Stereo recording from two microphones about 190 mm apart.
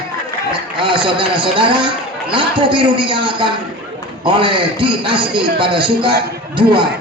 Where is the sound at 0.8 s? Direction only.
25° right (ahead or behind).